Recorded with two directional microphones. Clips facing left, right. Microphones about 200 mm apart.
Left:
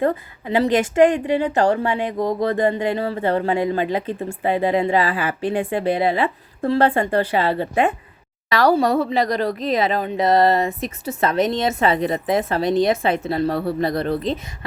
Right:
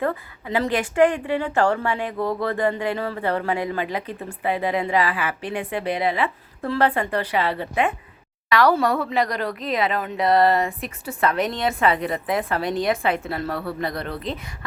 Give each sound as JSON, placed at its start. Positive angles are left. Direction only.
{"t": 0.0, "sound": "a woman's voice", "side_deg": 25}
{"t": 9.8, "sound": "a woman's voice", "side_deg": 30}
{"t": 13.5, "sound": "a woman's voice", "side_deg": 35}